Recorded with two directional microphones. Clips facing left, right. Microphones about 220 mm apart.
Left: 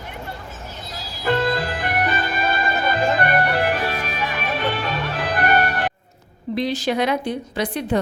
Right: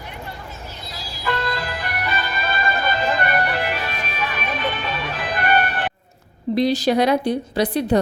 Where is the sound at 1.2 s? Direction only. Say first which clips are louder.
Left 5 dB; 50° left (ahead or behind).